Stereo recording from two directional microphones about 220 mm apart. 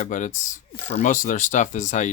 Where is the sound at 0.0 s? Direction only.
35° left (ahead or behind).